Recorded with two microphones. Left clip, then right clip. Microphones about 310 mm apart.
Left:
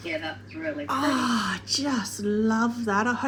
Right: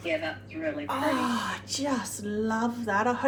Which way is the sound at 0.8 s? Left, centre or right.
Left.